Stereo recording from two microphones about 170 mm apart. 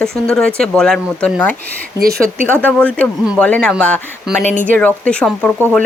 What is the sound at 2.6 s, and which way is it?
Speech, 10° left (ahead or behind).